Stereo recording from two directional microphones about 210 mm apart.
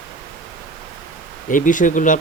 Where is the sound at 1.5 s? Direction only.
40° left (ahead or behind).